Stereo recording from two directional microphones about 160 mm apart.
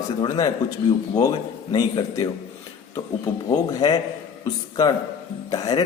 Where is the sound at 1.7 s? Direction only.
25° left (ahead or behind).